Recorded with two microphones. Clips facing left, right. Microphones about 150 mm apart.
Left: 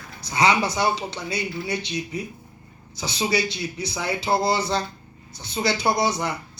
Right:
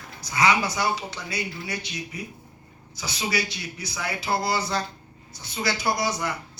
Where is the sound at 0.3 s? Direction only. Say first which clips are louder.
Left 2 dB; 25° left (ahead or behind).